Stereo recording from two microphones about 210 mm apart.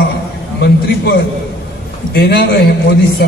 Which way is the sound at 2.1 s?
50° left (ahead or behind).